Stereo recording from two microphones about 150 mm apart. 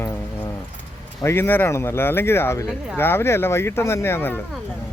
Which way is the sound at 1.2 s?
15° left (ahead or behind).